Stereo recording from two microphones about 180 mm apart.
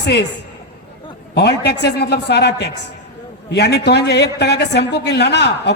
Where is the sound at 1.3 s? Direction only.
65° left (ahead or behind).